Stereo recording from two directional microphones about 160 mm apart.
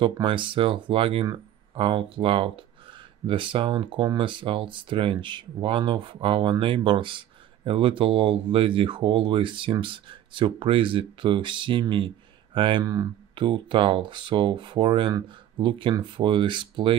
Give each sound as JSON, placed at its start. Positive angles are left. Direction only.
{"t": 0.0, "sound": "speech", "side_deg": -30}